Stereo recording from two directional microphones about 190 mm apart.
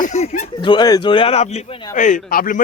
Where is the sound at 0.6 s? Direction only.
25° left (ahead or behind).